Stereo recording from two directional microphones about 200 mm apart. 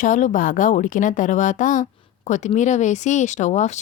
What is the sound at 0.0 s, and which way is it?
A woman's voice, 40° left (ahead or behind).